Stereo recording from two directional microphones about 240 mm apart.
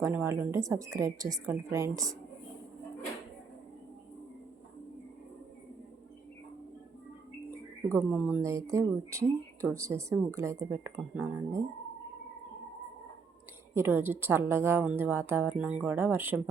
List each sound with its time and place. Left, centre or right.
0.0 s speech: centre
7.9 s speech: centre
13.7 s speech: centre